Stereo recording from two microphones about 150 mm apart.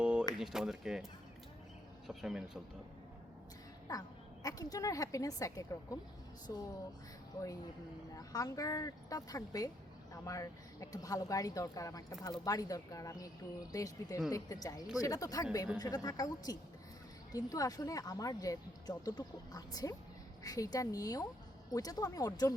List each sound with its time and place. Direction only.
0.0 s a sound: 5° right (ahead or behind)
0.3 s speech: 5° right (ahead or behind)
2.0 s speech: 5° right (ahead or behind)
3.9 s speech: 25° left (ahead or behind)
8.1 s speech: 25° left (ahead or behind)